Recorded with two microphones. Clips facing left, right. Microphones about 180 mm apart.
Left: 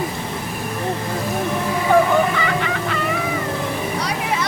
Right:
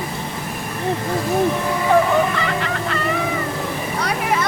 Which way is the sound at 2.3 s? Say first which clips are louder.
Left 1 dB; centre (ahead or behind).